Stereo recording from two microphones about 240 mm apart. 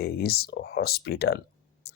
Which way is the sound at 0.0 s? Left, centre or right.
Left.